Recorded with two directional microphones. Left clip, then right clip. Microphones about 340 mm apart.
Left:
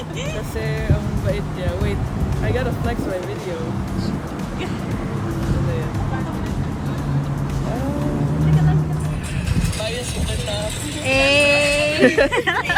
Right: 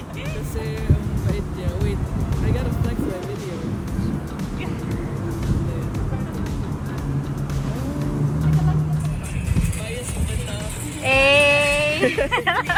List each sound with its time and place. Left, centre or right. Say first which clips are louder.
11.0 s a sound: right 1 dB; centre
12.0 s speech: left 5 dB; left
12.3 s speech: left 1 dB; centre